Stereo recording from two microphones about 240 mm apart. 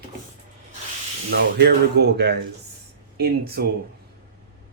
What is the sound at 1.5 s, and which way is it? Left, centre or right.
Speech, right.